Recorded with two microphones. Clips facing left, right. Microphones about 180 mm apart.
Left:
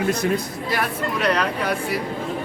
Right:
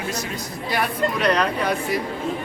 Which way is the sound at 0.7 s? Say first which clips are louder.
Right 2 dB; 5° left (ahead or behind).